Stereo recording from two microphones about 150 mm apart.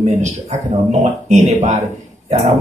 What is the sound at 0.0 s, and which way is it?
Speech, 50° right (ahead or behind).